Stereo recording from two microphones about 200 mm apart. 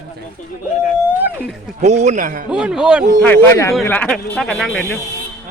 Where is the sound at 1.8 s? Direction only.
35° right (ahead or behind).